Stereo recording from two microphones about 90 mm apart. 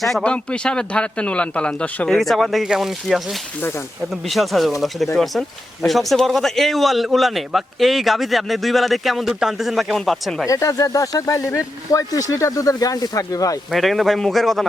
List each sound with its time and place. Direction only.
0.2 s a man's voice: 10° left (ahead or behind)
2.0 s a man's voice: 5° left (ahead or behind)
4.3 s a man's voice: centre (ahead or behind)
10.4 s speech: 40° left (ahead or behind)
13.7 s a man's voice: centre (ahead or behind)